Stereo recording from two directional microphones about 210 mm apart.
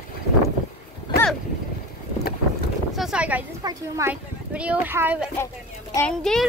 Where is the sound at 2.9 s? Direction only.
Centre (ahead or behind).